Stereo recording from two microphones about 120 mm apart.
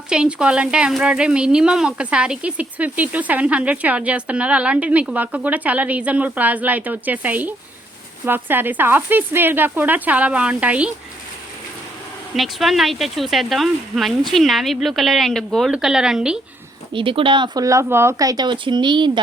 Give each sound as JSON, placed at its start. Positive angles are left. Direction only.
{"t": 0.1, "sound": "speech", "side_deg": -5}
{"t": 12.4, "sound": "speech", "side_deg": 0}
{"t": 16.9, "sound": "speech", "side_deg": -45}